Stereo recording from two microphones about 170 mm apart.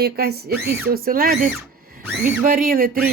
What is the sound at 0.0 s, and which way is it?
Speech, 70° right (ahead or behind).